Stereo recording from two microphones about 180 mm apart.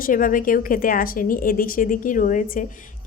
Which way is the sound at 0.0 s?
50° left (ahead or behind).